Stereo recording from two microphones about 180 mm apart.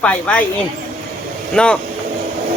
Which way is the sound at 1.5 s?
5° left (ahead or behind).